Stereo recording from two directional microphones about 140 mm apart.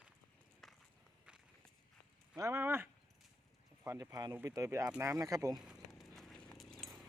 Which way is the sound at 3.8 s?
20° right (ahead or behind).